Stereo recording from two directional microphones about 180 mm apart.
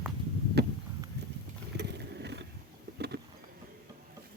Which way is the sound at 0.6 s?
65° right (ahead or behind).